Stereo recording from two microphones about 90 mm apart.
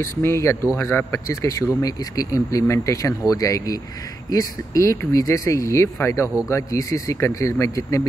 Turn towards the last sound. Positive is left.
turn(degrees=35)  # may be behind; listen again after turning